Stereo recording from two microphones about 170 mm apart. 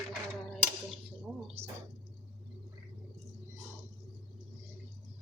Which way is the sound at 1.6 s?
35° right (ahead or behind).